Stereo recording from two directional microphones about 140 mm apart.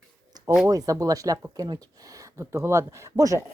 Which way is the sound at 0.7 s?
25° right (ahead or behind).